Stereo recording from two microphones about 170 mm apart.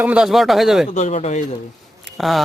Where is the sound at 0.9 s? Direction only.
40° left (ahead or behind).